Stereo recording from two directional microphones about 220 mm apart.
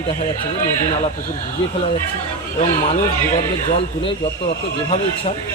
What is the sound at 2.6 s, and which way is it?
Speech, 30° left (ahead or behind).